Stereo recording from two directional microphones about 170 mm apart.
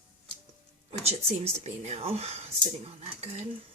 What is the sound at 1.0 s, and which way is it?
Speech, 40° right (ahead or behind).